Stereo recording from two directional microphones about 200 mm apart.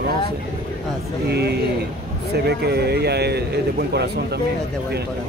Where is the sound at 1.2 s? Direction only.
55° right (ahead or behind).